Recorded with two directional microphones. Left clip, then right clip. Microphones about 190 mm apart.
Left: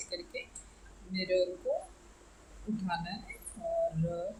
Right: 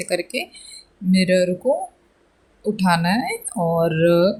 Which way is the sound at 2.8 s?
55° right (ahead or behind).